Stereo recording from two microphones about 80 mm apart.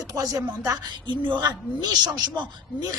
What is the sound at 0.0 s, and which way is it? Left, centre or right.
Speech, right.